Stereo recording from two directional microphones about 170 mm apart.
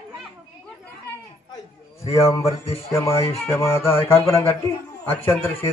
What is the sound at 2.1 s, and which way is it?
Speech, 35° left (ahead or behind).